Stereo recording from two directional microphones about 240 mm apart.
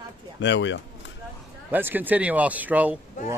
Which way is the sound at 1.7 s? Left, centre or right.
Centre.